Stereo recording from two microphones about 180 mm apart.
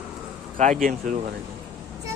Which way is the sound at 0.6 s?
40° right (ahead or behind).